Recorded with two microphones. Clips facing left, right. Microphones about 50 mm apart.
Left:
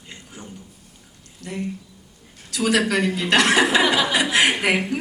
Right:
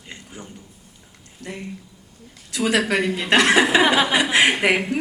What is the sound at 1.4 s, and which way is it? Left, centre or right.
A woman's voice, right.